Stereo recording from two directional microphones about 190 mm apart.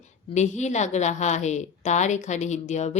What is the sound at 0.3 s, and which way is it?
A woman's voice, 40° left (ahead or behind).